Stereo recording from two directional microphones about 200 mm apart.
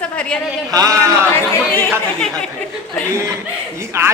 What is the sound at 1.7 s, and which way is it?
Chatter, 10° left (ahead or behind).